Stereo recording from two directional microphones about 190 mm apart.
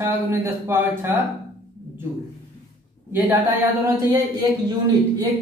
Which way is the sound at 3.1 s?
10° right (ahead or behind).